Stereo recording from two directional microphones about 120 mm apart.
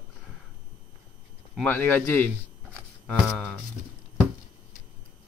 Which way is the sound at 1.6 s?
15° left (ahead or behind).